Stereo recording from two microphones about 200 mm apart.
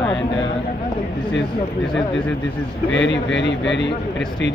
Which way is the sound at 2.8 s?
65° left (ahead or behind).